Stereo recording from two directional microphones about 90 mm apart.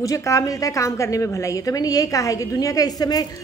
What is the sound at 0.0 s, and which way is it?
A woman's voice, 40° left (ahead or behind).